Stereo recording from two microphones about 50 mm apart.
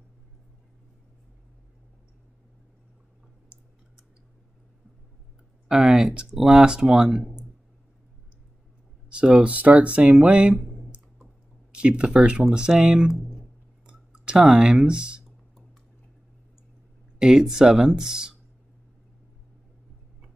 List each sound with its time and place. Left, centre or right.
5.7 s speech: centre
9.1 s speech: right
11.7 s speech: right
13.8 s clicking: centre
17.2 s speech: centre